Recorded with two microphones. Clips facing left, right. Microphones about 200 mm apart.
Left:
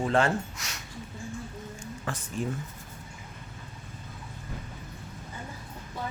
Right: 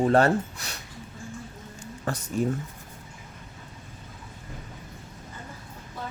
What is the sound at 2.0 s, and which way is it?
Speech, 40° right (ahead or behind).